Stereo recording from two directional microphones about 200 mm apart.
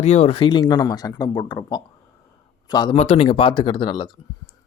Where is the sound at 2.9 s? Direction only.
30° left (ahead or behind).